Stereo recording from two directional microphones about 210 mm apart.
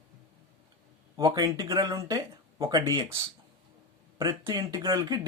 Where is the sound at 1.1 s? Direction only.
15° right (ahead or behind).